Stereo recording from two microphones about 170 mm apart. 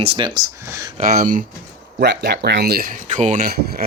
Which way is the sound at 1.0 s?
55° right (ahead or behind).